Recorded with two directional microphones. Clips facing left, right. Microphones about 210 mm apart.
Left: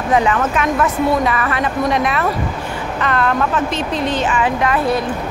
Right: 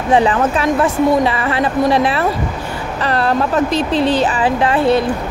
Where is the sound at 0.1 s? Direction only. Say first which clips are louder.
Right 3 dB; 30° right (ahead or behind).